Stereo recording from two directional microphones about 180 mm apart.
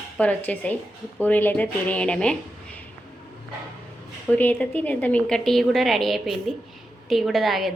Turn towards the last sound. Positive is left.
turn(degrees=0)  # may be behind; listen again after turning